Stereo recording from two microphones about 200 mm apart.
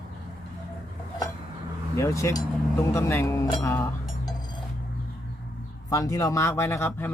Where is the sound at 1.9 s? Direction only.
15° left (ahead or behind).